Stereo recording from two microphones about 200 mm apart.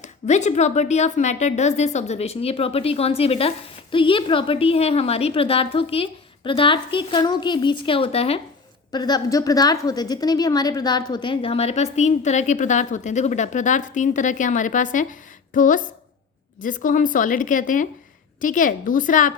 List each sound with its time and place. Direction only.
0.0 s a woman's voice: 35° left (ahead or behind)